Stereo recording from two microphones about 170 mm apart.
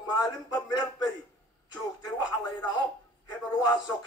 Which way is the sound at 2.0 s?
25° left (ahead or behind).